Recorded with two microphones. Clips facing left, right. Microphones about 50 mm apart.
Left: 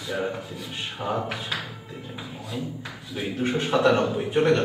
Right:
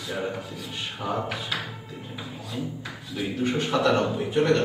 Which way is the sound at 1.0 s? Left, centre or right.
Left.